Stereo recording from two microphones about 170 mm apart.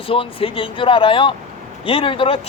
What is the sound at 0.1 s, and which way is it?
A man's voice, 30° left (ahead or behind).